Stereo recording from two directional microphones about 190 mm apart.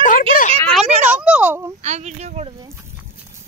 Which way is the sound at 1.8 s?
35° right (ahead or behind).